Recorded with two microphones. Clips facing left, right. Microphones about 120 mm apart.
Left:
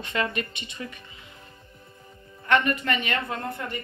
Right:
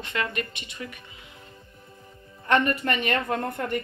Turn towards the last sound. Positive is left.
turn(degrees=-55)  # may be behind; listen again after turning